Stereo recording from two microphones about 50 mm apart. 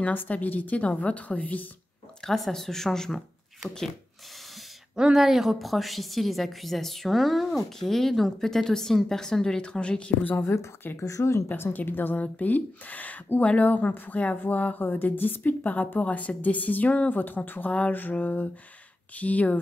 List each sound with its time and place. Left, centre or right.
0.0 s speech: left
2.2 s speech: centre
4.9 s a woman's voice: centre; by 10.1 s left
10.4 s speech: left
11.0 s speech: left
11.4 s speech: left